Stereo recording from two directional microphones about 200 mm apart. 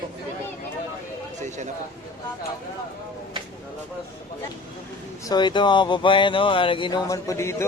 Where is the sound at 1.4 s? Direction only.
35° right (ahead or behind).